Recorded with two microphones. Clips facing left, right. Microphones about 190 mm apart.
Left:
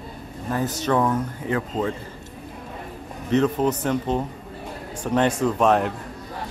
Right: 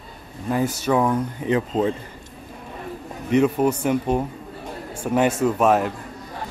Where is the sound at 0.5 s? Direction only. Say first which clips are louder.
Right 2 dB; 10° right (ahead or behind).